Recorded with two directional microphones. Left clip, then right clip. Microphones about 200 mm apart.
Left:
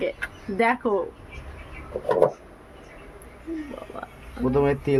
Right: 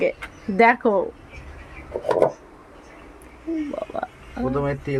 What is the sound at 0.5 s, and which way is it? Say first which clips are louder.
Speech: right 6 dB; 30° right (ahead or behind).